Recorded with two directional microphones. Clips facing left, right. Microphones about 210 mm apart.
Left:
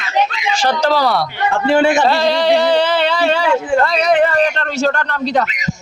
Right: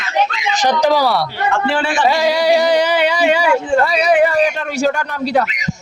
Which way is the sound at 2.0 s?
10° right (ahead or behind).